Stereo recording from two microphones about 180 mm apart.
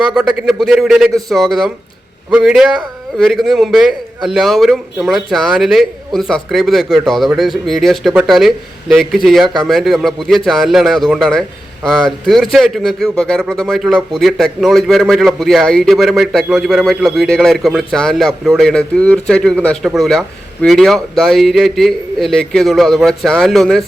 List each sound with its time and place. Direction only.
0.1 s a man's voice: centre (ahead or behind)